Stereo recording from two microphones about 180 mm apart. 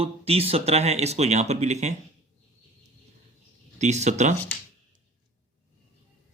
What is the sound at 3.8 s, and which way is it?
Speech, 40° right (ahead or behind).